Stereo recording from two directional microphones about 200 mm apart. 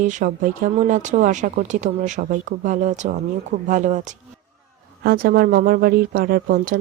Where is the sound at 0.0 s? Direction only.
40° right (ahead or behind).